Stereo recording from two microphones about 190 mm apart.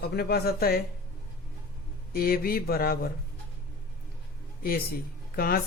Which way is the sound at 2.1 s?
50° left (ahead or behind).